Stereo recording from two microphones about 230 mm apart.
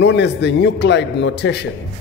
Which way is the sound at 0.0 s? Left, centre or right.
Left.